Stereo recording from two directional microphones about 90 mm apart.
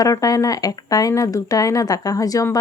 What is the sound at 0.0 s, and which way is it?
Speech, 40° left (ahead or behind).